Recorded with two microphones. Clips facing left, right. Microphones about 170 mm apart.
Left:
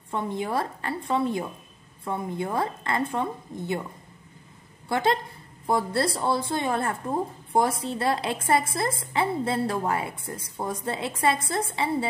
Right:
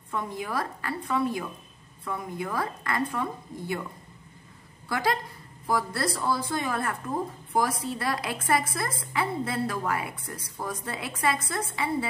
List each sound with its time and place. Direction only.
0.1 s a woman's voice: 25° left (ahead or behind)
4.8 s a woman's voice: 25° left (ahead or behind)